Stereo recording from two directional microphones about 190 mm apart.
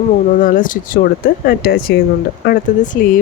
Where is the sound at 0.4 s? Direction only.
45° left (ahead or behind).